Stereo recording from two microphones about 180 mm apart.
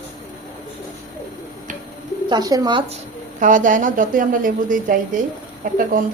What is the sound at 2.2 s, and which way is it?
Speech, 25° right (ahead or behind).